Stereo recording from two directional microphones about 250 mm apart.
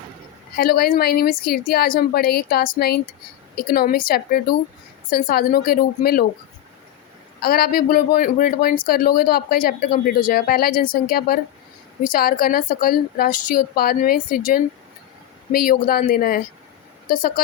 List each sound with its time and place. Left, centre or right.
0.5 s speech: left
7.4 s speech: left